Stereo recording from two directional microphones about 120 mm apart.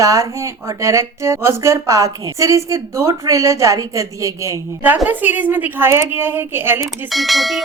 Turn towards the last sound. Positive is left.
turn(degrees=0)  # may be behind; listen again after turning